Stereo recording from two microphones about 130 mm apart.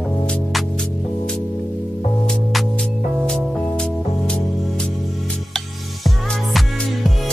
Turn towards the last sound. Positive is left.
turn(degrees=0)  # may be behind; listen again after turning